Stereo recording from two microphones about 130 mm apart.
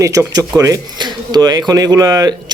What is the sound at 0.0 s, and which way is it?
Speech, 25° right (ahead or behind).